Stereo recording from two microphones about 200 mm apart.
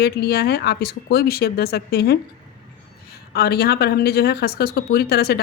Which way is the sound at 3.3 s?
50° left (ahead or behind).